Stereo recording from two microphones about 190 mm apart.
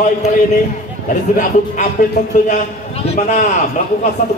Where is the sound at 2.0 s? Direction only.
40° left (ahead or behind).